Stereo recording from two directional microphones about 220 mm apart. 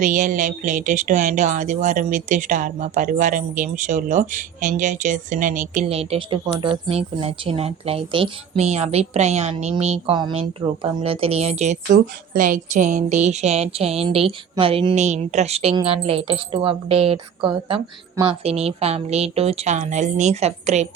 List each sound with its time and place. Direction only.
0.0 s speech: 35° right (ahead or behind)
11.9 s a woman's voice: 40° right (ahead or behind)